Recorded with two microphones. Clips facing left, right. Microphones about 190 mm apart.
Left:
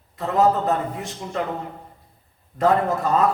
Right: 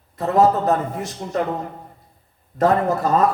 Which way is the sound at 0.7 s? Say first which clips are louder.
Right 3 dB; 40° right (ahead or behind).